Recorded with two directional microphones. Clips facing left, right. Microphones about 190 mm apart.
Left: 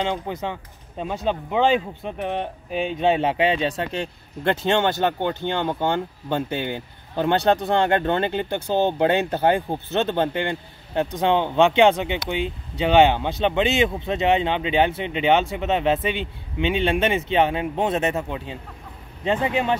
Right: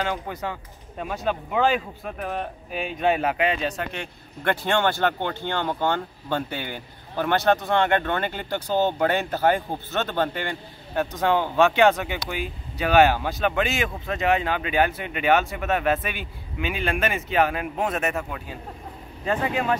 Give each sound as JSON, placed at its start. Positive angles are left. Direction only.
{"t": 0.0, "sound": "speech", "side_deg": 20}